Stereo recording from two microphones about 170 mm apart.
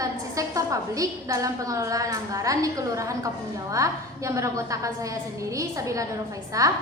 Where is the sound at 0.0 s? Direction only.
20° right (ahead or behind).